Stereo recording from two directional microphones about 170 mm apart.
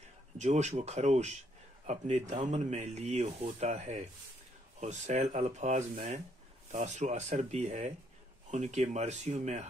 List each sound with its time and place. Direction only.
0.4 s speech: 40° right (ahead or behind)